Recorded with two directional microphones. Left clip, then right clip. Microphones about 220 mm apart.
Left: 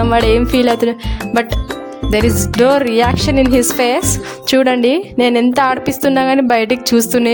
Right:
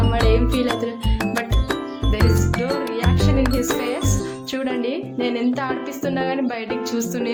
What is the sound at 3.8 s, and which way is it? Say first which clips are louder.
Speech: left 10 dB; 50° left (ahead or behind).